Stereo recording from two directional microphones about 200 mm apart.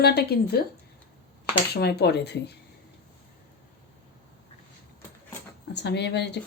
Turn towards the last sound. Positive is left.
turn(degrees=55)  # may be behind; listen again after turning